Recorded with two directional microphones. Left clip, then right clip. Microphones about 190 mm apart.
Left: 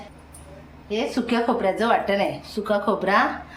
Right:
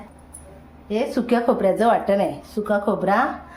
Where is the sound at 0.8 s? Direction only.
60° right (ahead or behind); by 3.2 s 45° right (ahead or behind).